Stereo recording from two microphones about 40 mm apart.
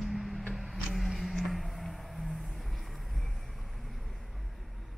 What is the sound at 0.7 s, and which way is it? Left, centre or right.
Vehicle, centre.